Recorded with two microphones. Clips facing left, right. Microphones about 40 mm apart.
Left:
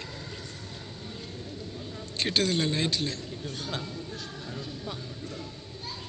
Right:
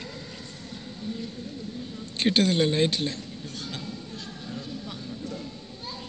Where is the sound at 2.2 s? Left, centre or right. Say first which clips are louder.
Right 4 dB; right.